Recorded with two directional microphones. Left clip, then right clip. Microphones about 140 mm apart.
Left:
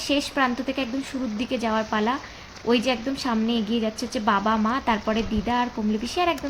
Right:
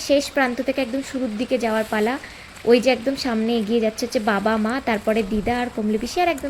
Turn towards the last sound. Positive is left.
turn(degrees=-15)  # may be behind; listen again after turning